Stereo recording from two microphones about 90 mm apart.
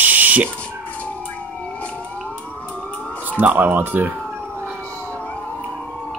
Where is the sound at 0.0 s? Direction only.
20° right (ahead or behind).